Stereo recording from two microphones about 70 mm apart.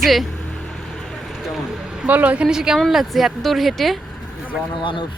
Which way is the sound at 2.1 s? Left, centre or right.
Right.